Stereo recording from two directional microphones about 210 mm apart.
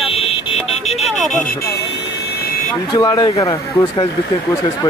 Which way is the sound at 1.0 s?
Centre (ahead or behind).